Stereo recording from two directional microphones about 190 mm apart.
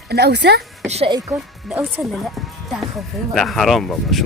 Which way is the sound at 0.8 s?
35° right (ahead or behind).